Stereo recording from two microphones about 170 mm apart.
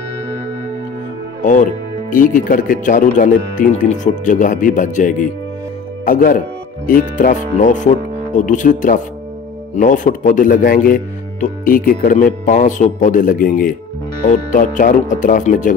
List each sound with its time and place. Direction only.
1.4 s speech: 50° left (ahead or behind)